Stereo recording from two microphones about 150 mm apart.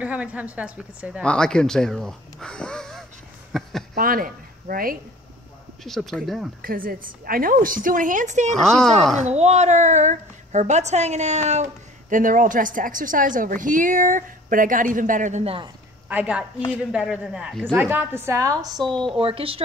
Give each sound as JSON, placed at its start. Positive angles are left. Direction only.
{"t": 0.0, "sound": "a woman's voice", "side_deg": -10}
{"t": 1.2, "sound": "speech", "side_deg": 5}
{"t": 3.5, "sound": "a sound", "side_deg": 0}
{"t": 3.9, "sound": "speech", "side_deg": -70}
{"t": 5.9, "sound": "speech", "side_deg": 0}
{"t": 6.6, "sound": "a woman's voice", "side_deg": -75}
{"t": 8.5, "sound": "speech", "side_deg": 5}
{"t": 9.2, "sound": "a woman's voice", "side_deg": -45}
{"t": 12.1, "sound": "a woman's voice", "side_deg": -60}
{"t": 15.4, "sound": "speech", "side_deg": -35}
{"t": 16.1, "sound": "a woman's voice", "side_deg": -10}
{"t": 19.0, "sound": "speech", "side_deg": -35}